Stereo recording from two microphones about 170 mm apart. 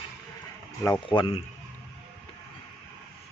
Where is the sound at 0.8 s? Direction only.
25° left (ahead or behind).